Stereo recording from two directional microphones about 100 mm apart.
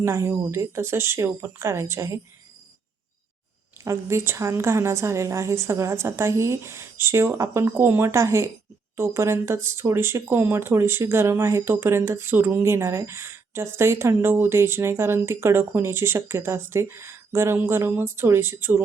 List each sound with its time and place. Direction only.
0.0 s speech: 30° right (ahead or behind)
3.8 s speech: 25° right (ahead or behind)